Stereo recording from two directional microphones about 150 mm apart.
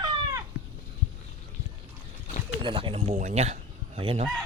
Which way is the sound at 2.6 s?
35° right (ahead or behind).